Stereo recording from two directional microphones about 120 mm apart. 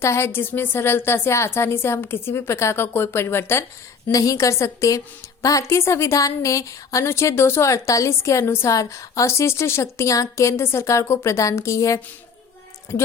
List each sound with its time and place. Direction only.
0.0 s a woman's voice: 20° left (ahead or behind)